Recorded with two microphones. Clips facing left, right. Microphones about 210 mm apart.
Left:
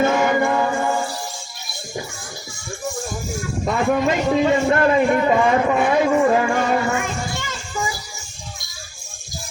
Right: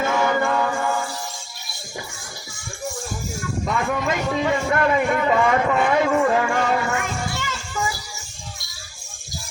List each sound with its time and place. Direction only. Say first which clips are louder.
0.0 s music: left 3 dB; 20° left (ahead or behind)
4.0 s a man's voice: left 5 dB; 30° left (ahead or behind)